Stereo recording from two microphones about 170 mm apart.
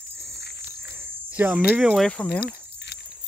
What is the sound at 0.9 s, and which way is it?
Cricket, 10° right (ahead or behind).